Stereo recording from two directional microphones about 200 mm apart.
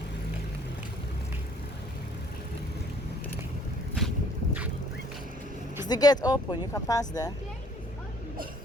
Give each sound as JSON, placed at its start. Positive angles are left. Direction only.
{"t": 5.9, "sound": "speech", "side_deg": 20}